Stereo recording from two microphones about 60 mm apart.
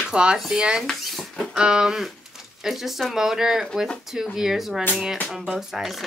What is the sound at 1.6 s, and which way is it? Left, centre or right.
Speech, centre.